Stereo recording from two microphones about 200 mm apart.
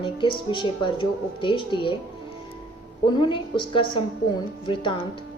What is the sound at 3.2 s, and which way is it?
Speech, 25° left (ahead or behind).